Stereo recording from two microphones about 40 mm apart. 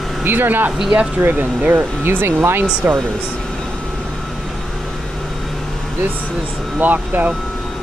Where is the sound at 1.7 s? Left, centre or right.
Right.